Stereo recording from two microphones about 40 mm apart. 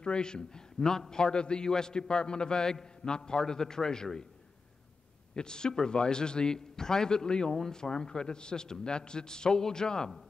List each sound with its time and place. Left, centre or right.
0.0 s a man's voice: left
5.3 s a man's voice: centre